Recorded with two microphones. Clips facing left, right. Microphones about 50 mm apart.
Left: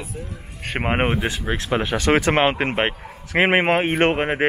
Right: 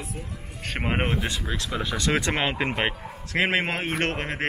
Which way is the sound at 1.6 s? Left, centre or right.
Left.